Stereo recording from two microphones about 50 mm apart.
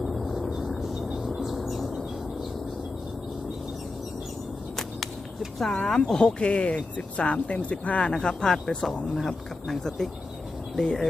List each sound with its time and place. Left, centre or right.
0.0 s vehicle: centre
0.7 s a sound: centre
5.8 s speech: centre